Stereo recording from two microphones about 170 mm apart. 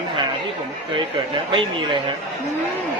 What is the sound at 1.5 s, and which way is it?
Speech, 30° right (ahead or behind).